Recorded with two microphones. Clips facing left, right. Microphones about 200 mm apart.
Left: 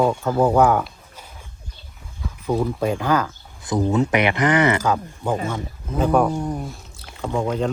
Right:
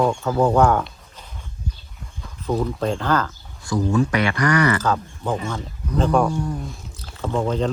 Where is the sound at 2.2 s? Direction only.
5° left (ahead or behind).